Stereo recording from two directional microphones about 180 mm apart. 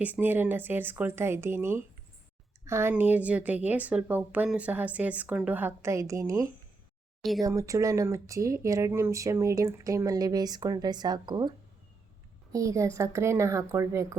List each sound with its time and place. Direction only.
0.0 s speech: 10° right (ahead or behind)
7.2 s speech: centre (ahead or behind)
7.4 s speech: 15° right (ahead or behind)